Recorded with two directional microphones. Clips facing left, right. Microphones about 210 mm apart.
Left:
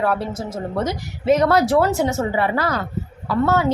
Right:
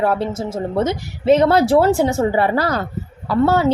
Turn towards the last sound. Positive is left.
turn(degrees=-30)  # may be behind; listen again after turning